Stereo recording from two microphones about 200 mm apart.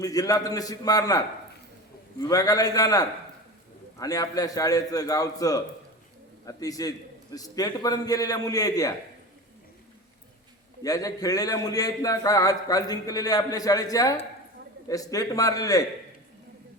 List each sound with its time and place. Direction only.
0.0 s a man's voice: 20° left (ahead or behind)
10.8 s a man's voice: 15° left (ahead or behind)